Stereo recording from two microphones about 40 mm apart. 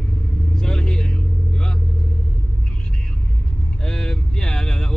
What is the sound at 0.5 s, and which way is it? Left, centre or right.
Vehicle, centre.